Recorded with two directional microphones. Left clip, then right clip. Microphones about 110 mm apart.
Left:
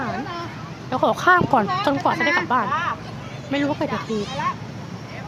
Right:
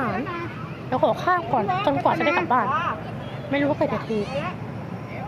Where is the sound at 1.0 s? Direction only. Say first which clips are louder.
Left 4 dB; 90° left.